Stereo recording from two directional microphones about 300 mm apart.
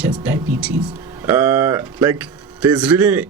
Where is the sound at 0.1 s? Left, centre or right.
Centre.